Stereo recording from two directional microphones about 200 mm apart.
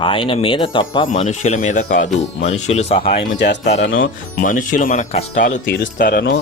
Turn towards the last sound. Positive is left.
turn(degrees=50)  # may be behind; listen again after turning